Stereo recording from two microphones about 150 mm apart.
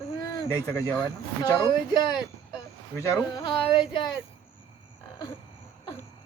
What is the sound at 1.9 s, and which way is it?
Speech, 30° left (ahead or behind).